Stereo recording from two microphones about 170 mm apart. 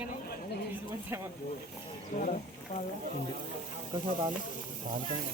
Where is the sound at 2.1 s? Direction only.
50° left (ahead or behind).